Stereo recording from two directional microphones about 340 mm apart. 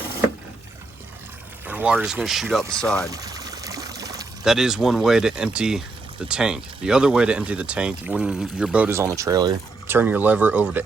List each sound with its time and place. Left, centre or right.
1.6 s speech: centre
3.1 s pour: centre
6.2 s speech: centre